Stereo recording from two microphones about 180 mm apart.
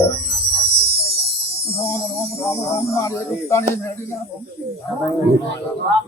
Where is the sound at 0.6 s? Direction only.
60° right (ahead or behind).